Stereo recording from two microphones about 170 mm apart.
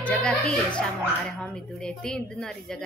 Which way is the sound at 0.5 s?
5° left (ahead or behind).